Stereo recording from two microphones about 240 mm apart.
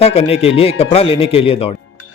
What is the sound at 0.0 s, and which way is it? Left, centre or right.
Speech, left.